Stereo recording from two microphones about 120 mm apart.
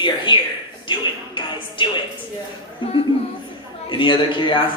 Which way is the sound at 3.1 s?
45° left (ahead or behind).